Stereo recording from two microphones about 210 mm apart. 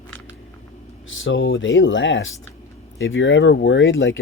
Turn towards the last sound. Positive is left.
turn(degrees=65)  # may be behind; listen again after turning